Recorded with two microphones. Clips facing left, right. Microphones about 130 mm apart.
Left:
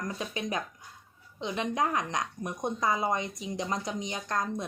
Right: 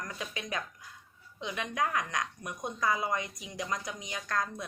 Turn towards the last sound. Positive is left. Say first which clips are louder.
# left 2 dB
turn(degrees=20)  # may be behind; listen again after turning